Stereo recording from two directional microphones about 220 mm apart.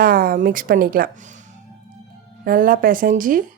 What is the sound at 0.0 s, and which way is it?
A woman's voice, 40° right (ahead or behind).